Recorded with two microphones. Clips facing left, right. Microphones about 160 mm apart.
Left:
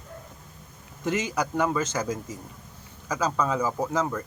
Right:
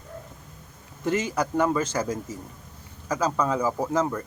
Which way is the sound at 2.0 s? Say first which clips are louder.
Right 1 dB; 10° left (ahead or behind).